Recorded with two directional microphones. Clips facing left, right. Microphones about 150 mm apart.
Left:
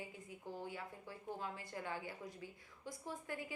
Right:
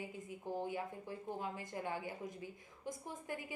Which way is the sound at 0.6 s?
15° right (ahead or behind).